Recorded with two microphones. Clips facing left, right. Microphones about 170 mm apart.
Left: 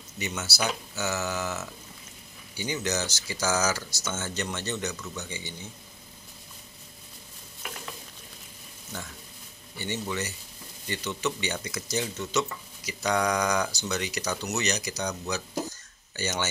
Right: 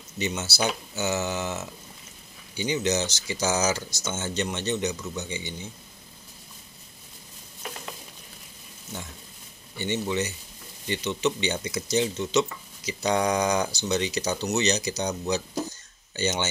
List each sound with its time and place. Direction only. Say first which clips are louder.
0.2 s speech: right 4 dB; 25° right (ahead or behind)
9.8 s speech: right 5 dB; 20° right (ahead or behind)